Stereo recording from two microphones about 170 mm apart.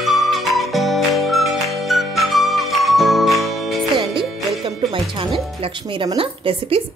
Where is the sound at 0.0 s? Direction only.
Centre (ahead or behind).